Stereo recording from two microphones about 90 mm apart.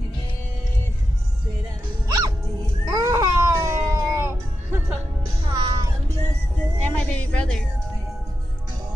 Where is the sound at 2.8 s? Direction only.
40° right (ahead or behind).